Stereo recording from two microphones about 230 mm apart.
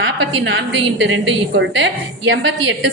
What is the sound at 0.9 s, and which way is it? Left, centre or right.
A woman's voice, right.